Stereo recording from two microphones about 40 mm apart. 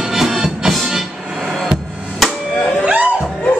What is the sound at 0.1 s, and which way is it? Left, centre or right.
Music, centre.